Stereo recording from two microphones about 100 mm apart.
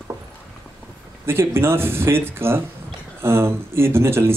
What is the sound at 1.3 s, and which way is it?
Speech, 25° right (ahead or behind).